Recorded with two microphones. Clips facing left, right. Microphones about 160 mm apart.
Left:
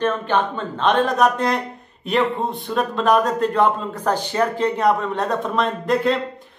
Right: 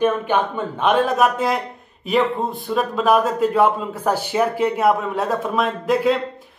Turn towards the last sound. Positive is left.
turn(degrees=-5)  # may be behind; listen again after turning